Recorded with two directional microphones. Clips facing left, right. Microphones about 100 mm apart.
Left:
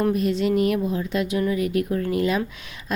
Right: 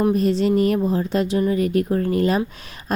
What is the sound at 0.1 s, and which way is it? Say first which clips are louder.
Speech: right 3 dB; 35° right (ahead or behind).